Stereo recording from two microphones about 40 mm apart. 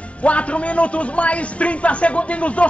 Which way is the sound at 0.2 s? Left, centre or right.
Left.